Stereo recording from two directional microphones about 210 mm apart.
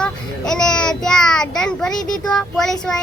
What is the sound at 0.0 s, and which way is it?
Child singing, 5° left (ahead or behind).